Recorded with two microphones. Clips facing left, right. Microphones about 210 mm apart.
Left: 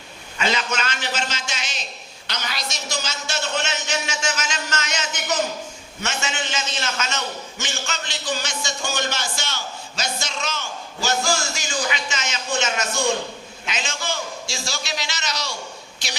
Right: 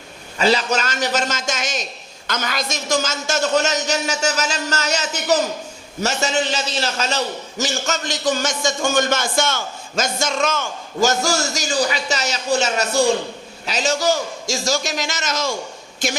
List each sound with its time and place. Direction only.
0.3 s a man's voice: 35° right (ahead or behind)